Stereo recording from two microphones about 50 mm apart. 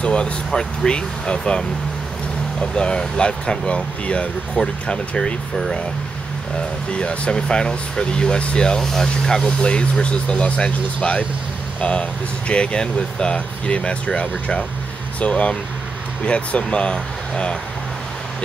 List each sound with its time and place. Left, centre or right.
0.0 s speech: centre
6.9 s speech: left